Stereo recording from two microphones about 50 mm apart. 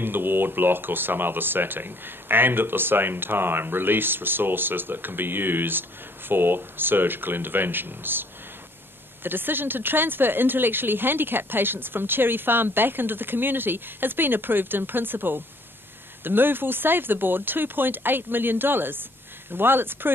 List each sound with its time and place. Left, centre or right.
0.0 s speech: right